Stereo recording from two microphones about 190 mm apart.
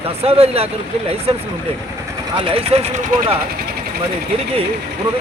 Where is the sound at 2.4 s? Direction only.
30° right (ahead or behind).